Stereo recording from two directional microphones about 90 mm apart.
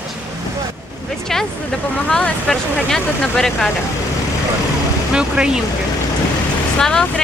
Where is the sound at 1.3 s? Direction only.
5° left (ahead or behind).